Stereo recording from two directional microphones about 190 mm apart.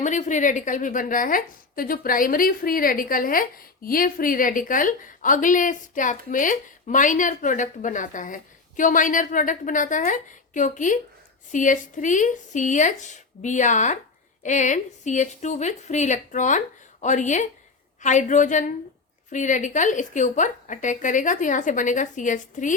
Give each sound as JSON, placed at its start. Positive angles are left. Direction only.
{"t": 0.0, "sound": "a woman's voice", "side_deg": 40}